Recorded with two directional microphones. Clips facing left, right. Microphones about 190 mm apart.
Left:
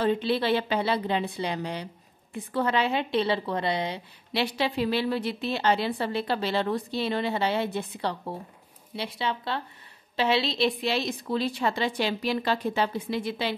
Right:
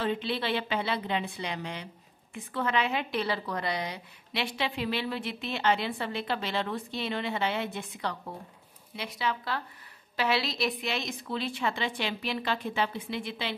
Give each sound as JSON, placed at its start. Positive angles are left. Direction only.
{"t": 0.0, "sound": "a woman's voice", "side_deg": 40}